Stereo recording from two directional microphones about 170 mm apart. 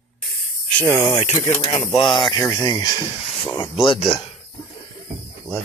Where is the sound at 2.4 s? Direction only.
20° left (ahead or behind).